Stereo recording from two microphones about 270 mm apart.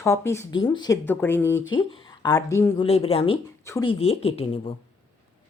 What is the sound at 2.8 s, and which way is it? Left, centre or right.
Speech, left.